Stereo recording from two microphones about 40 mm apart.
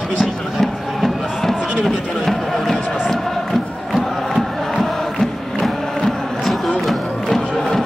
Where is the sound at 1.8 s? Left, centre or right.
Centre.